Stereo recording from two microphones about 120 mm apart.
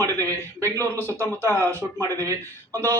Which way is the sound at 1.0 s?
20° left (ahead or behind).